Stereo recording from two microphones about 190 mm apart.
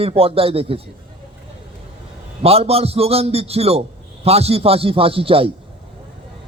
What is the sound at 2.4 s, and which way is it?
A man's voice, 30° right (ahead or behind).